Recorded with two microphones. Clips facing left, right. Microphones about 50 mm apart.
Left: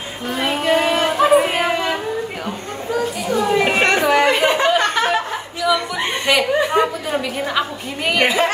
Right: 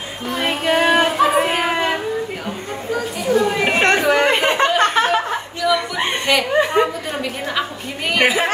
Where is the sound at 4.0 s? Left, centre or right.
Centre.